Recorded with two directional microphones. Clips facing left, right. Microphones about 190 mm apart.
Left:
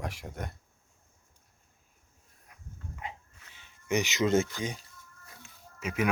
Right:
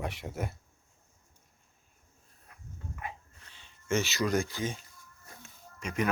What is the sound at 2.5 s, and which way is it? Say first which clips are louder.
Dog: right 1 dB; 20° left (ahead or behind).